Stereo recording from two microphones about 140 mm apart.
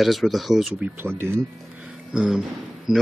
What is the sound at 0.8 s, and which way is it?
Speech, 15° right (ahead or behind).